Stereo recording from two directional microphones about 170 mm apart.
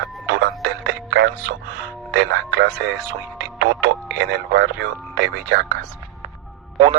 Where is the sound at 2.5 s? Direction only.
90° right.